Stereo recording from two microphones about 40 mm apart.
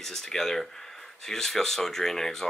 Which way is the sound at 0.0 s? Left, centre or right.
Centre.